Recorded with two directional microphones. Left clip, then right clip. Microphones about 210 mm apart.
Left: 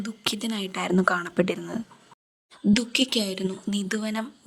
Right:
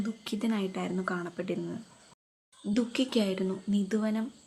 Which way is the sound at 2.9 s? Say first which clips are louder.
Left 5 dB; 50° left (ahead or behind).